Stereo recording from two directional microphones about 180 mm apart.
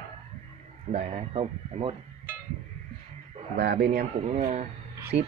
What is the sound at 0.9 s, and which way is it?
Speech, 40° right (ahead or behind).